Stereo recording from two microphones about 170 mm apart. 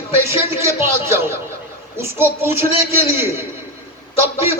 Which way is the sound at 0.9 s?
15° right (ahead or behind).